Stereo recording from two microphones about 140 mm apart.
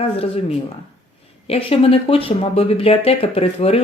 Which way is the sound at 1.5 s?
45° left (ahead or behind).